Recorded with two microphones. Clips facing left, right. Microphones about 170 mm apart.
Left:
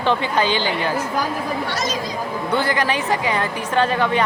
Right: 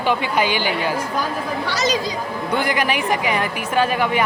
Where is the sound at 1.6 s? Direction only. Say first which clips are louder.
Right 3 dB; 80° right.